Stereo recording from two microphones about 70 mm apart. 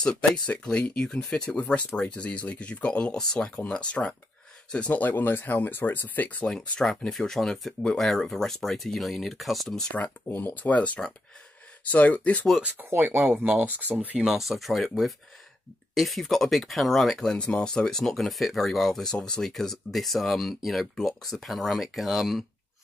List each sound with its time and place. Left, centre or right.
0.0 s speech: centre
6.4 s speech: centre
9.9 s speech: left
12.9 s speech: right
14.2 s speech: centre